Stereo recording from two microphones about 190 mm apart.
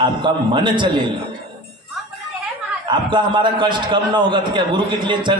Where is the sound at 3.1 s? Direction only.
25° right (ahead or behind).